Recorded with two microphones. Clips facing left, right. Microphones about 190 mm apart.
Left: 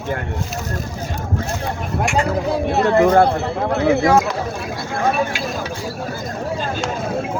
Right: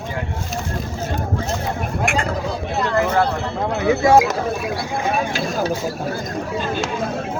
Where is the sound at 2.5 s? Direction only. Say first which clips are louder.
Left 7 dB; 60° left (ahead or behind).